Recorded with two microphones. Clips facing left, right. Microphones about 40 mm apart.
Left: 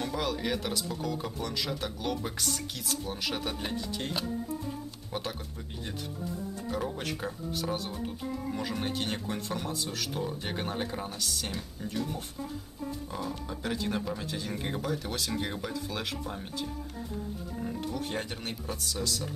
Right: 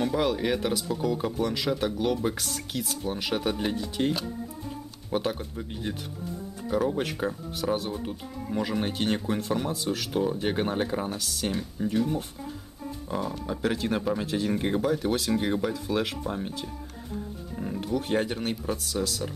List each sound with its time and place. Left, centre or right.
0.0 s speech: centre
5.1 s speech: centre
18.0 s speech: centre